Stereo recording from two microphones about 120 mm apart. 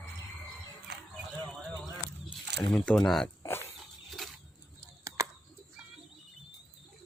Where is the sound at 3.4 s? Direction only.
20° left (ahead or behind).